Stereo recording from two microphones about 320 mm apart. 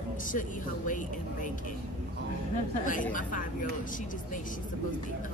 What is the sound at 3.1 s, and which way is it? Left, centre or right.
Speech, left.